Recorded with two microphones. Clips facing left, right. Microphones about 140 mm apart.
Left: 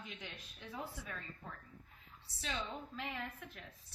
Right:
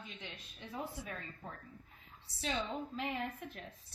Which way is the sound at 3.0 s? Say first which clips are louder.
Right 5 dB; 50° right (ahead or behind).